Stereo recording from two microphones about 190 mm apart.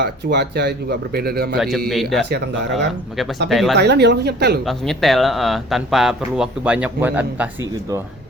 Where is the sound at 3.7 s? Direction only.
60° right (ahead or behind).